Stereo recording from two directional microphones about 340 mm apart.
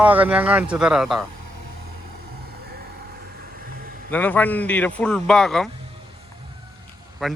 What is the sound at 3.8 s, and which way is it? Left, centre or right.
Vehicle, right.